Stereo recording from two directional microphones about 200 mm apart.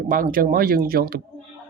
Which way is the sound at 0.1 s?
45° right (ahead or behind).